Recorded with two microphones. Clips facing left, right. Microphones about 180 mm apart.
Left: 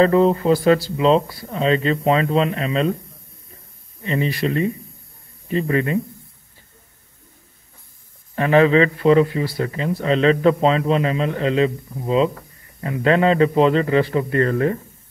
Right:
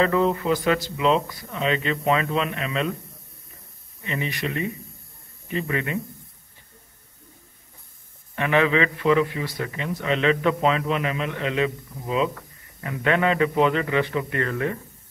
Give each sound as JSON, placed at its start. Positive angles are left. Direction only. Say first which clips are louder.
{"t": 0.0, "sound": "a man's voice", "louder": "left 6 dB", "side_deg": 35}
{"t": 4.0, "sound": "a man's voice", "louder": "left 7 dB", "side_deg": 35}
{"t": 8.4, "sound": "a man's voice", "louder": "left 6 dB", "side_deg": 35}